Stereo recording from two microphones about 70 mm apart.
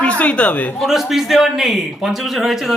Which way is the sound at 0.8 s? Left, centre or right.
Centre.